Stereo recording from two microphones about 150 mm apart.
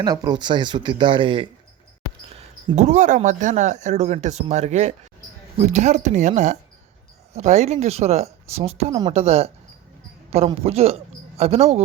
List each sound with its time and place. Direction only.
0.0 s speech: 25° right (ahead or behind)
2.7 s a man's voice: 55° right (ahead or behind)